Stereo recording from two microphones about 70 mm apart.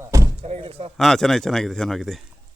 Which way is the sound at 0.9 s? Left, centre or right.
Centre.